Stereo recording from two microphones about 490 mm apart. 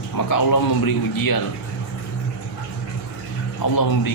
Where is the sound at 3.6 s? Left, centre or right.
Left.